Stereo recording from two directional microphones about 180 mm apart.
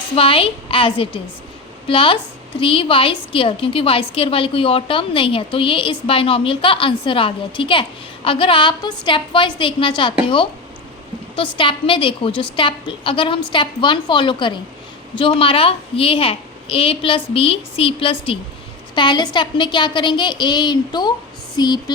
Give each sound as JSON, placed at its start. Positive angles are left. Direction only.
{"t": 0.2, "sound": "a woman's voice", "side_deg": 30}
{"t": 11.3, "sound": "a woman's voice", "side_deg": 30}